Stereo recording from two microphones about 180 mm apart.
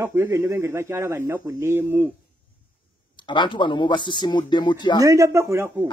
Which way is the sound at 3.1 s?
25° left (ahead or behind).